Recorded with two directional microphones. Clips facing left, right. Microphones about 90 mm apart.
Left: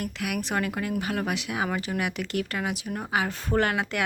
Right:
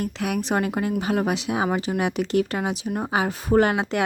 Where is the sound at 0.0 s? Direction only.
25° right (ahead or behind).